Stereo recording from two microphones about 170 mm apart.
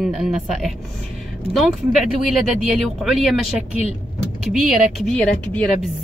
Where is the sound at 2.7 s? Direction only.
Centre (ahead or behind).